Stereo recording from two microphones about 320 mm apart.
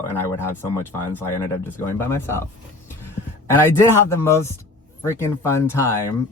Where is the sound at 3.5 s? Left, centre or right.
Centre.